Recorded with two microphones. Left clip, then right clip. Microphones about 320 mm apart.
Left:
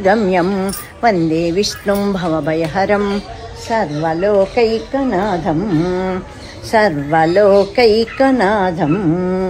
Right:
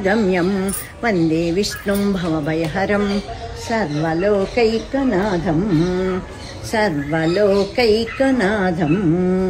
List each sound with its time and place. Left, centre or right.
0.0 s speech: centre
6.7 s speech: left